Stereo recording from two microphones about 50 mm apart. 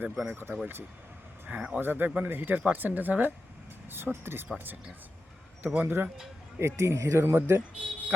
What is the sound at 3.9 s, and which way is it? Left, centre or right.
Speech, right.